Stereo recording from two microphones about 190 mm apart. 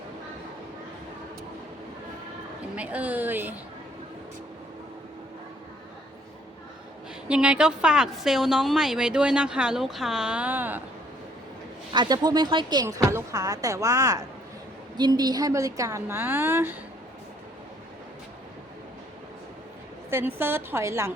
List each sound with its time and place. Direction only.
2.7 s a woman's voice: 5° right (ahead or behind)
7.3 s a woman's voice: 5° right (ahead or behind)
11.9 s a woman's voice: 20° right (ahead or behind)
20.1 s a woman's voice: 10° right (ahead or behind)